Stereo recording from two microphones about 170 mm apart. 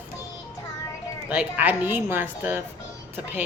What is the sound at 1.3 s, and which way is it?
Speech, 10° right (ahead or behind).